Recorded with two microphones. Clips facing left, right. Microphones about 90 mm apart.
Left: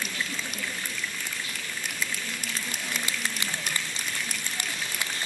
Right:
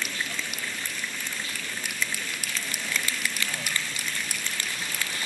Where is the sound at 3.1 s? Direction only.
20° left (ahead or behind).